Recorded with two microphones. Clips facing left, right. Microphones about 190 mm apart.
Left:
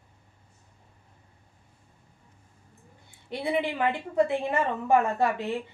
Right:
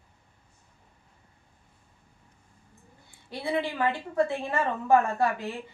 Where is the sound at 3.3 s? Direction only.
20° left (ahead or behind).